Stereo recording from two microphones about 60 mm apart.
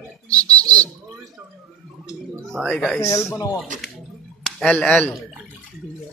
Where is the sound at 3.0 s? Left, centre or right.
Left.